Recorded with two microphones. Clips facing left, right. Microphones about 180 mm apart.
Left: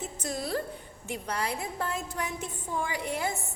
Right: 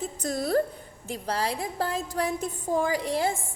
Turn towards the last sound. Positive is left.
turn(degrees=-35)  # may be behind; listen again after turning